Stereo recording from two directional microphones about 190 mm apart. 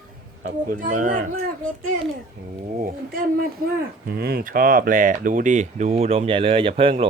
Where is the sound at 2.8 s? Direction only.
50° right (ahead or behind).